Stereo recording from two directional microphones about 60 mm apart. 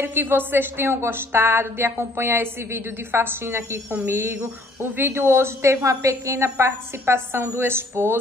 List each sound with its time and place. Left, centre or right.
0.0 s speech: right
4.9 s a woman's voice: right